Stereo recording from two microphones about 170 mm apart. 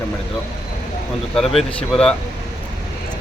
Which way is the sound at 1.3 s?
Centre (ahead or behind).